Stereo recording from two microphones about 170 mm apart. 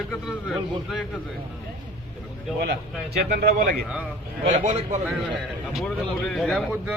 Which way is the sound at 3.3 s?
70° right (ahead or behind).